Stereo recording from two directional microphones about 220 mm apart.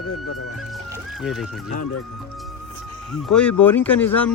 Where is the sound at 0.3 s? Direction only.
90° left.